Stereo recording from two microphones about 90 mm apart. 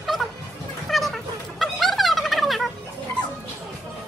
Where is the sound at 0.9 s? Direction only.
Centre (ahead or behind).